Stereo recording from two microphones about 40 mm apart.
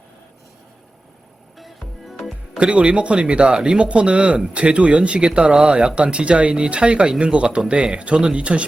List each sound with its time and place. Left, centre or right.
1.5 s music: centre
2.6 s a man's voice: right